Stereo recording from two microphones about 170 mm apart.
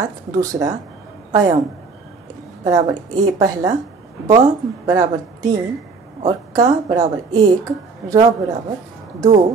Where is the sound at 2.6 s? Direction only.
20° right (ahead or behind).